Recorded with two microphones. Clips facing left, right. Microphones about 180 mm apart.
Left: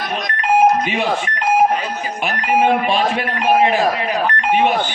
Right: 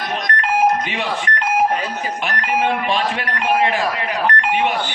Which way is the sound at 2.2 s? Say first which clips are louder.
Left 5 dB; 20° left (ahead or behind).